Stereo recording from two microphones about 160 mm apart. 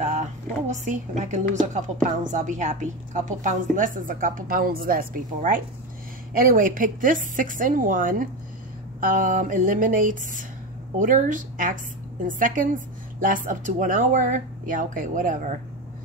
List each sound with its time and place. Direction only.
0.0 s a woman's voice: 50° right (ahead or behind)